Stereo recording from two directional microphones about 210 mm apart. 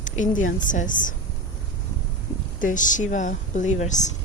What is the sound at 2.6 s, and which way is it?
Speech, 40° left (ahead or behind).